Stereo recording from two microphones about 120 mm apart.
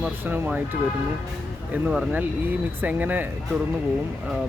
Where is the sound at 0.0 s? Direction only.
15° right (ahead or behind).